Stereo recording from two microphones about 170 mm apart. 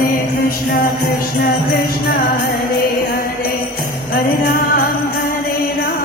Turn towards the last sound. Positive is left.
turn(degrees=60)  # may be behind; listen again after turning